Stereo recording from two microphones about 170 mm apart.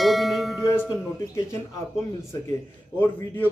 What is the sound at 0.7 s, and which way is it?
Speech, 15° left (ahead or behind).